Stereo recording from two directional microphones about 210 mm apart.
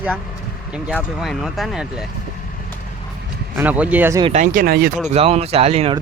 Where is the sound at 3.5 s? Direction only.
5° right (ahead or behind).